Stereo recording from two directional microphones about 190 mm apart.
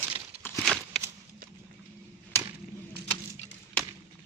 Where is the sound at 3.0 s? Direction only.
60° right (ahead or behind).